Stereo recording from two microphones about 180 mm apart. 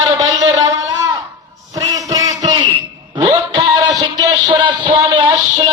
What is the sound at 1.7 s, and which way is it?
Music, 20° right (ahead or behind).